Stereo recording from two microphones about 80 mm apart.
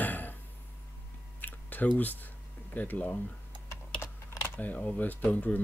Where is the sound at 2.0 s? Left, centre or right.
Left.